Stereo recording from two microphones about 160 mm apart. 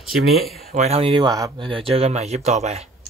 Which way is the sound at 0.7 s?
45° right (ahead or behind).